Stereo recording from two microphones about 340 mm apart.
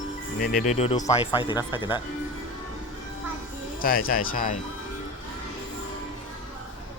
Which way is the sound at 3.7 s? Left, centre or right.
Left.